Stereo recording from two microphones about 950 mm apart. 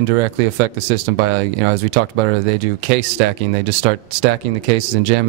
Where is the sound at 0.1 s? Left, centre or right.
Right.